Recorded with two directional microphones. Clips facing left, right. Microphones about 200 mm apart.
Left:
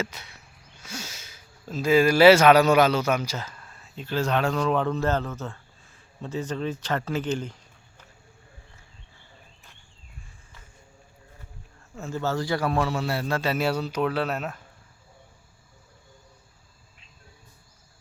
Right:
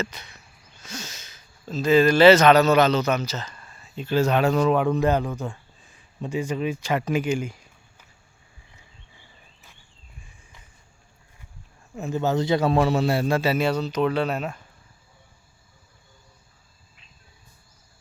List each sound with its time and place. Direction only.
0.0 s speech: 10° left (ahead or behind); by 8.0 s 10° right (ahead or behind)
11.9 s a man's voice: 15° right (ahead or behind)
13.4 s speech: 5° right (ahead or behind)
13.7 s speech: 10° left (ahead or behind)